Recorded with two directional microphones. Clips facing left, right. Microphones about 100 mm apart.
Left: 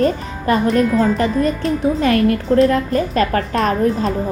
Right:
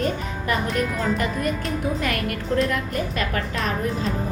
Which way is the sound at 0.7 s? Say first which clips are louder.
Left 9 dB; centre (ahead or behind).